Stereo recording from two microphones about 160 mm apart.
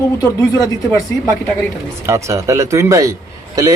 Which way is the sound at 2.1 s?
20° right (ahead or behind).